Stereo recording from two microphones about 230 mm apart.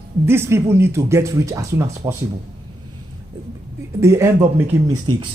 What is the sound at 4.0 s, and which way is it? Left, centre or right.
Speech, centre.